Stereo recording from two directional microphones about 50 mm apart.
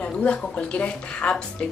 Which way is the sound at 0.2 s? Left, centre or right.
Left.